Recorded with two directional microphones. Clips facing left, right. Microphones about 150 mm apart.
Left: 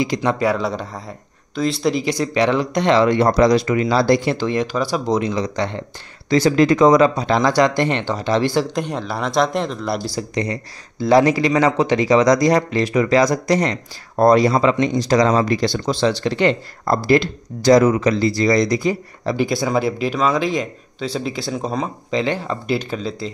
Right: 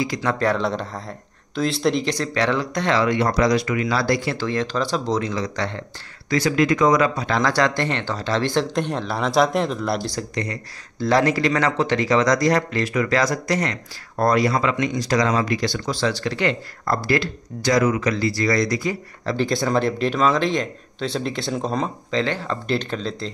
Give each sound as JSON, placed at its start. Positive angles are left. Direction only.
{"t": 0.0, "sound": "speech", "side_deg": 20}
{"t": 0.4, "sound": "speech", "side_deg": 5}
{"t": 6.3, "sound": "speech", "side_deg": 30}
{"t": 8.6, "sound": "speech", "side_deg": 0}
{"t": 10.3, "sound": "speech", "side_deg": 15}
{"t": 22.1, "sound": "speech", "side_deg": 15}